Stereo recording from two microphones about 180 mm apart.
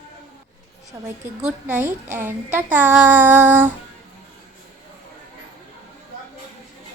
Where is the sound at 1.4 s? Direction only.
10° right (ahead or behind).